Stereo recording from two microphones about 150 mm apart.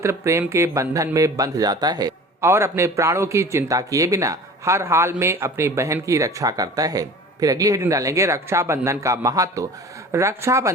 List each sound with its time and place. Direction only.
0.0 s speech: 20° right (ahead or behind)